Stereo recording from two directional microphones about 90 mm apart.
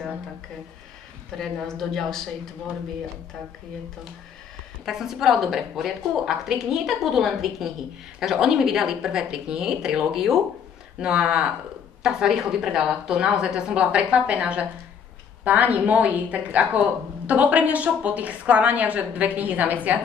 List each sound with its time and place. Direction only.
1.3 s a woman's voice: 5° left (ahead or behind)
4.8 s a woman's voice: 5° right (ahead or behind)